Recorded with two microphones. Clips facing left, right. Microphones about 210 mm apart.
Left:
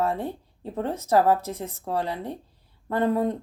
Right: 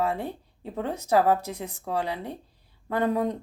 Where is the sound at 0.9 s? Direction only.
15° right (ahead or behind).